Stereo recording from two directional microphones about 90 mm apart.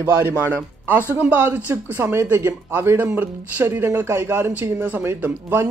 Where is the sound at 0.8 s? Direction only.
20° right (ahead or behind).